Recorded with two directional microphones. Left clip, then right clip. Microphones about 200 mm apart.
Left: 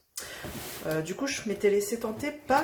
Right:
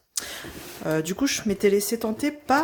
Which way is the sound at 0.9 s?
50° right (ahead or behind).